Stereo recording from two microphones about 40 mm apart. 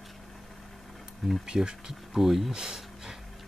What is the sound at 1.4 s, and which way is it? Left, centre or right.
Speech, right.